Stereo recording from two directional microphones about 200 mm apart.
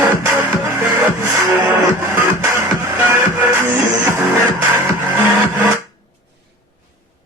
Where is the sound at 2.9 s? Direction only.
10° right (ahead or behind).